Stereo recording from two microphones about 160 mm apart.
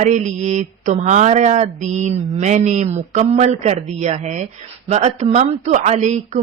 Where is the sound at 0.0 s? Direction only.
50° right (ahead or behind).